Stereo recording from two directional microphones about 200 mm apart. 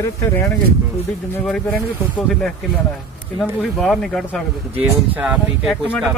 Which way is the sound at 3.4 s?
Centre (ahead or behind).